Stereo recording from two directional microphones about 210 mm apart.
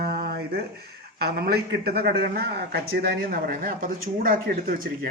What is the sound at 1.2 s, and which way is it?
A woman's voice, 50° right (ahead or behind).